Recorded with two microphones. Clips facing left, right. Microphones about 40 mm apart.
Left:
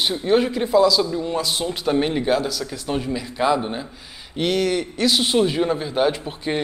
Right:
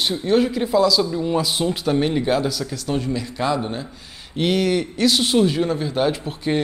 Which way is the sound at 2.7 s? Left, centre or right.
Centre.